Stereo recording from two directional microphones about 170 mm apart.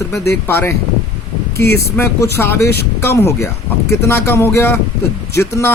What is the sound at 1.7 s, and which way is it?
Speech, 15° left (ahead or behind).